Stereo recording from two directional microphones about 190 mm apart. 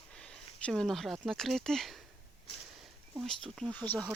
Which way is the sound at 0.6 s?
5° left (ahead or behind).